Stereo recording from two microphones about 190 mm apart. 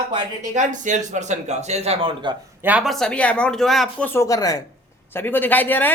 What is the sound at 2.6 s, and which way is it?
Speech, 5° right (ahead or behind).